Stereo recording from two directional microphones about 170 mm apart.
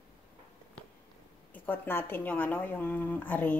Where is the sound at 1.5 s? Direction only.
10° left (ahead or behind).